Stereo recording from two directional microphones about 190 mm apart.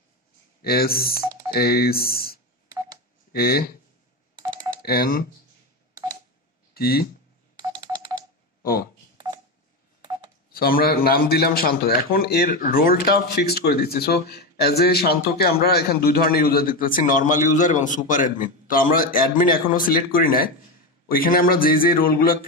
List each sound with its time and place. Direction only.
0.6 s a man's voice: 55° left (ahead or behind)
4.8 s a man's voice: 50° left (ahead or behind)
6.7 s speech: 55° left (ahead or behind)
7.8 s telephone dialing: 20° right (ahead or behind)
10.5 s a man's voice: 50° left (ahead or behind)